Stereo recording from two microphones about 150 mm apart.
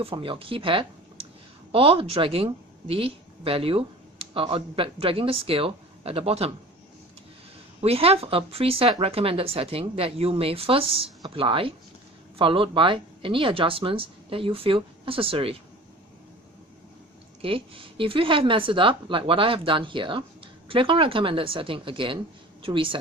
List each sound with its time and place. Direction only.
0.0 s speech: 35° right (ahead or behind)
7.8 s speech: 40° right (ahead or behind)
17.4 s speech: 35° right (ahead or behind)